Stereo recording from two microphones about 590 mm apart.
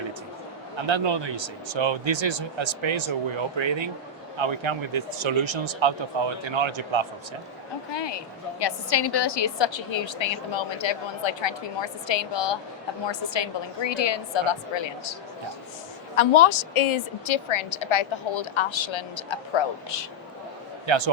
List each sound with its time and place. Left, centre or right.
0.9 s speech: right
7.9 s a woman's voice: left
16.1 s a woman's voice: left
20.8 s speech: right